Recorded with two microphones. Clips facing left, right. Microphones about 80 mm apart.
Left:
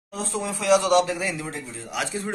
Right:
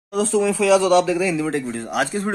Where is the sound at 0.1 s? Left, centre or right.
Right.